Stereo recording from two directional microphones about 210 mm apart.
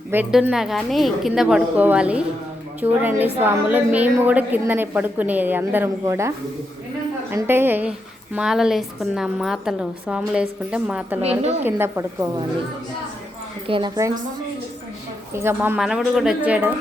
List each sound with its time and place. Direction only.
0.1 s a woman's voice: 5° right (ahead or behind)
13.7 s a woman's voice: 20° right (ahead or behind)
15.4 s a woman's voice: 10° right (ahead or behind)